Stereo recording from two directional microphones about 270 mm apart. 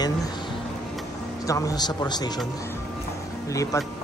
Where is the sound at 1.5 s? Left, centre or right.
Centre.